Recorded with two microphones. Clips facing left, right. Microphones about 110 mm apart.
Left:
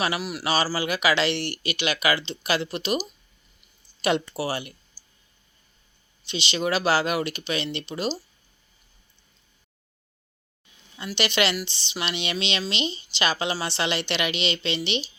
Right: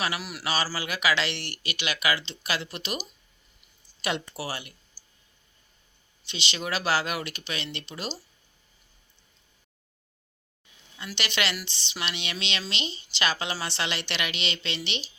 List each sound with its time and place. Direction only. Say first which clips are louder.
0.2 s speech: left 5 dB; 15° left (ahead or behind)
4.0 s speech: left 7 dB; 25° left (ahead or behind)
6.2 s speech: left 7 dB; 25° left (ahead or behind)
11.2 s speech: left 6 dB; 20° left (ahead or behind)